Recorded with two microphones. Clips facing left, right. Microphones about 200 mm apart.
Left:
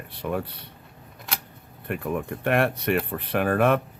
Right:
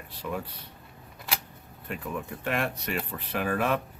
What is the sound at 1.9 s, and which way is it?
Speech, 60° left (ahead or behind).